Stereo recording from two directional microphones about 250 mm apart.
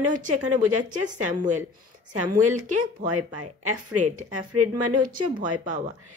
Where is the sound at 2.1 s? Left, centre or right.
Right.